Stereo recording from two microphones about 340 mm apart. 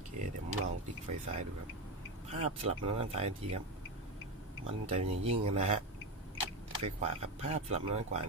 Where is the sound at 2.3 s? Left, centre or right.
Centre.